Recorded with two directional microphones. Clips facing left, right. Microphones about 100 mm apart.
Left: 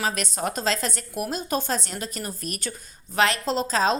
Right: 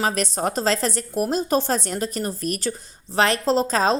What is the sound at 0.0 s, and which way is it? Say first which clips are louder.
Speech: right 4 dB; 40° right (ahead or behind).